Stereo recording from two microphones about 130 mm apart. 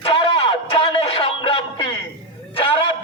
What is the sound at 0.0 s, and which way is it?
Music, 45° left (ahead or behind).